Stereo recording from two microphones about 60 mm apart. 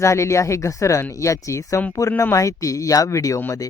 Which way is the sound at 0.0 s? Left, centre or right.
Left.